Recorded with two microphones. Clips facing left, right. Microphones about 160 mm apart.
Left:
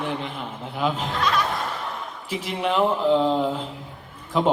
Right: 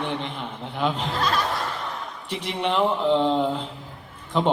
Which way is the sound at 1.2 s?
30° right (ahead or behind).